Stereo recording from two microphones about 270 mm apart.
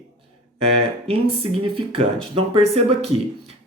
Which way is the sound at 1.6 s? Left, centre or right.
Centre.